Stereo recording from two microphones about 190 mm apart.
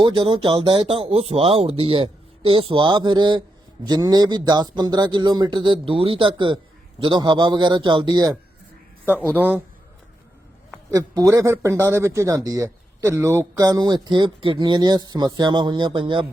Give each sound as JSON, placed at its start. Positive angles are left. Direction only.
{"t": 0.0, "sound": "speech", "side_deg": -25}
{"t": 9.3, "sound": "a man's voice", "side_deg": -10}
{"t": 10.9, "sound": "speech", "side_deg": -20}